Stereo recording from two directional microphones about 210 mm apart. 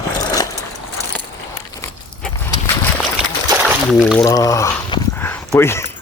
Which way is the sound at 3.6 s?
Centre (ahead or behind).